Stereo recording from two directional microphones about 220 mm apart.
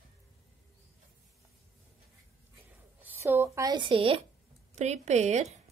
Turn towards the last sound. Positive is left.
turn(degrees=-30)  # may be behind; listen again after turning